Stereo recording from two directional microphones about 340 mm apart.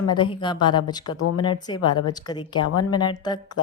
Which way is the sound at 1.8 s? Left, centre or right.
Left.